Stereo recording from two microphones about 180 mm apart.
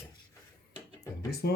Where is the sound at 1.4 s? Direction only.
65° left (ahead or behind).